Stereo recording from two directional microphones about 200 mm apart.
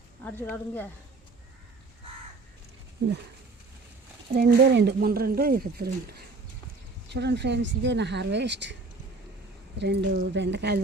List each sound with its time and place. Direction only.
0.3 s speech: 10° left (ahead or behind)
4.4 s speech: 50° right (ahead or behind)
9.7 s speech: 60° right (ahead or behind)